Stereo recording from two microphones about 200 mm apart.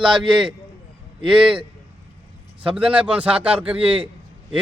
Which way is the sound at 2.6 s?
5° right (ahead or behind).